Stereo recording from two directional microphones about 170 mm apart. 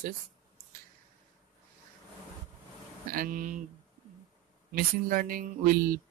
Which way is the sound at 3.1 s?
55° right (ahead or behind).